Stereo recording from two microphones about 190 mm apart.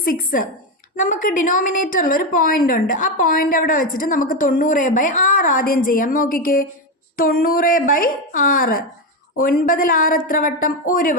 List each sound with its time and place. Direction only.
0.0 s a woman's voice: 50° left (ahead or behind)